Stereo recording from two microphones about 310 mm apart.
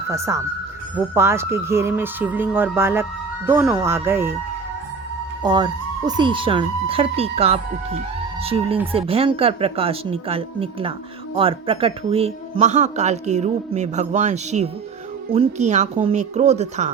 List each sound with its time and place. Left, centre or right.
0.1 s speech: centre
5.4 s speech: centre